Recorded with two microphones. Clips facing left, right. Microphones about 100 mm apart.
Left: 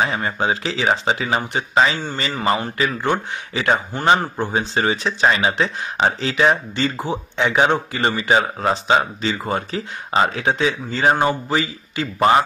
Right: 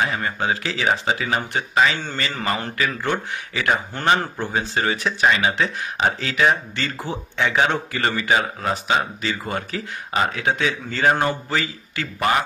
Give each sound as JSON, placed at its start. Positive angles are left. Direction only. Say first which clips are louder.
{"t": 0.0, "sound": "speech", "louder": "left 2 dB", "side_deg": 25}